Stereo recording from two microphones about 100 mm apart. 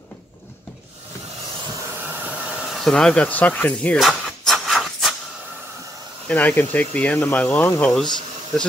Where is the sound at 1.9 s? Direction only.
20° right (ahead or behind).